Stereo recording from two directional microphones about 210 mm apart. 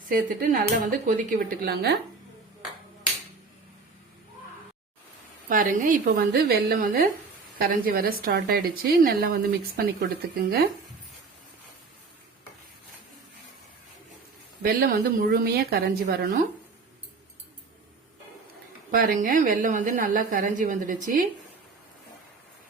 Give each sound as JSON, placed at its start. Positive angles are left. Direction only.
{"t": 0.1, "sound": "a woman's voice", "side_deg": -40}
{"t": 5.5, "sound": "a woman's voice", "side_deg": -40}
{"t": 14.6, "sound": "a woman's voice", "side_deg": -45}
{"t": 18.9, "sound": "a woman's voice", "side_deg": -45}